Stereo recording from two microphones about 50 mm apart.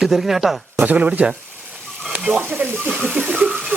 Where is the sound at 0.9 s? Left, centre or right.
Right.